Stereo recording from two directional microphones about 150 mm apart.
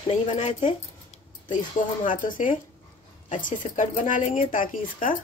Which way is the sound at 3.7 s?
55° left (ahead or behind).